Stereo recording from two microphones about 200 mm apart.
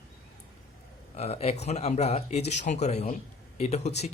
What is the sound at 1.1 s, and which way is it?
Speech, 30° left (ahead or behind).